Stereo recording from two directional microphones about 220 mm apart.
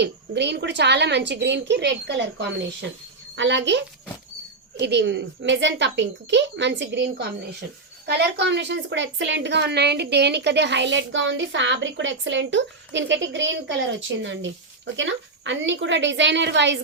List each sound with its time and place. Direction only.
0.0 s a woman's voice: 50° right (ahead or behind)